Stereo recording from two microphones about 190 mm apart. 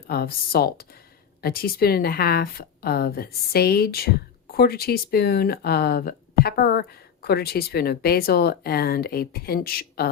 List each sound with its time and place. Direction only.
0.1 s a woman's voice: 55° left (ahead or behind)